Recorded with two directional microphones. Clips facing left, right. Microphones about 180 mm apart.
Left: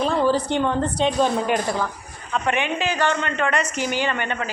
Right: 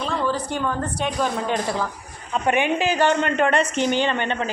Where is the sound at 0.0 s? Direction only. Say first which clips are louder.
Left 5 dB; 30° left (ahead or behind).